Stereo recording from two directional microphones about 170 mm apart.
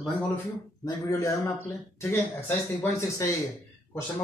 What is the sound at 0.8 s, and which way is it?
Speech, 20° left (ahead or behind).